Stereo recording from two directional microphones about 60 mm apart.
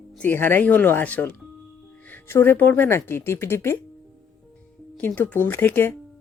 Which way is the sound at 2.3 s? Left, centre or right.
Left.